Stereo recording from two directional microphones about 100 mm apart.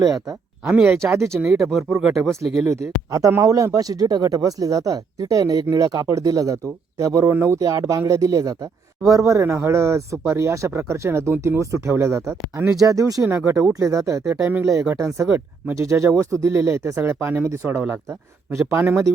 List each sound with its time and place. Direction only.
0.1 s speech: centre (ahead or behind)
1.1 s speech: 30° right (ahead or behind)
1.5 s speech: 5° right (ahead or behind)
2.6 s speech: 35° right (ahead or behind)
12.8 s speech: 35° right (ahead or behind)